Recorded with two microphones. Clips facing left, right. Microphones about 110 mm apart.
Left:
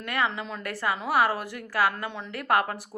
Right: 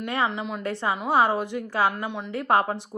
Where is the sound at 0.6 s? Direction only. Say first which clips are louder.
Right 2 dB; 25° right (ahead or behind).